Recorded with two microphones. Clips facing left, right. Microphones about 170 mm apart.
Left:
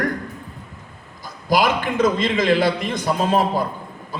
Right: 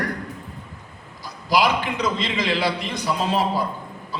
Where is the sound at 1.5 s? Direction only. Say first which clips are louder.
Left 2 dB; 50° left (ahead or behind).